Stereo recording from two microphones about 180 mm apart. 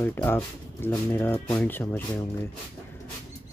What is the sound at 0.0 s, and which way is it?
Speech, 10° left (ahead or behind).